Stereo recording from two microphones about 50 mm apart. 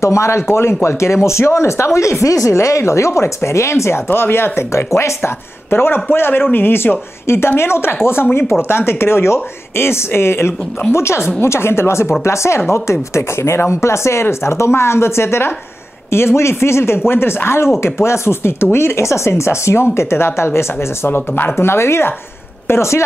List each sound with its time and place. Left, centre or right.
0.0 s speech: left
0.4 s speech: left
2.0 s speech: left